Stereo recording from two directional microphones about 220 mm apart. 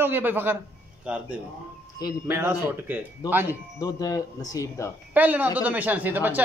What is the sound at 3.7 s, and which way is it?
Speech, 15° left (ahead or behind).